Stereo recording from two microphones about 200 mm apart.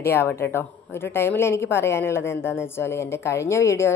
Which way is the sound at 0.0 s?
10° left (ahead or behind).